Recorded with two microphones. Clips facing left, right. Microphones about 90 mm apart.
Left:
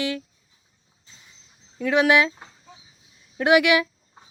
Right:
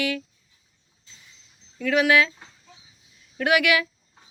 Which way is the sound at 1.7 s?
25° left (ahead or behind).